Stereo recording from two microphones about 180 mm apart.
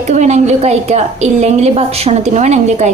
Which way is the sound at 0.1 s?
40° right (ahead or behind).